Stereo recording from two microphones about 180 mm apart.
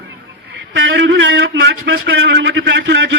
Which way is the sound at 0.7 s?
90° right.